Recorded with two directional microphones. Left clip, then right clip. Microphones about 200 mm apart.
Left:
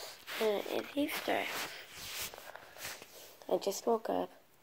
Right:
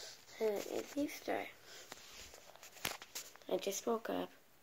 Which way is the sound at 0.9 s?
20° left (ahead or behind).